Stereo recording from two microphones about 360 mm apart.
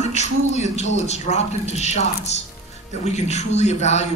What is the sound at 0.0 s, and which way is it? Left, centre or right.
A man's voice, centre.